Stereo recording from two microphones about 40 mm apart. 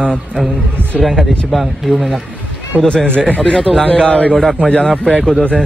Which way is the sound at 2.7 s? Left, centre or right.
Right.